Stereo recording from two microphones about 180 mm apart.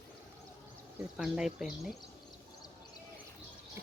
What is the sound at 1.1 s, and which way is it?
Speech, centre (ahead or behind).